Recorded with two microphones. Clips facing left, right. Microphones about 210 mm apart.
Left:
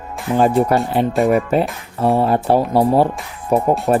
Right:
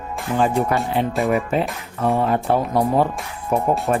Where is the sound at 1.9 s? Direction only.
35° left (ahead or behind).